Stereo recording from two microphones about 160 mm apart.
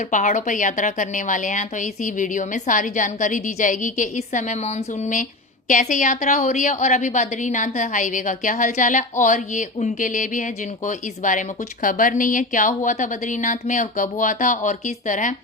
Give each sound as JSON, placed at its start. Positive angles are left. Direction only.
{"t": 0.1, "sound": "a woman's voice", "side_deg": 50}